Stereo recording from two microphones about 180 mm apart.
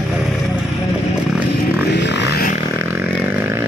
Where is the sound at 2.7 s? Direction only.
10° right (ahead or behind).